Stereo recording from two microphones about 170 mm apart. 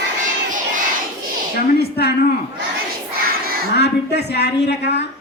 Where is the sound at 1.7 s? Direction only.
70° left (ahead or behind).